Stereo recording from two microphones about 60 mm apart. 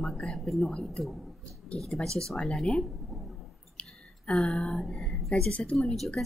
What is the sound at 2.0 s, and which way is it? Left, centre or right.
Speech, centre.